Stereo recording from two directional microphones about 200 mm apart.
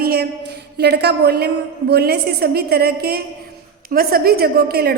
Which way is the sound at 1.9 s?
55° right (ahead or behind).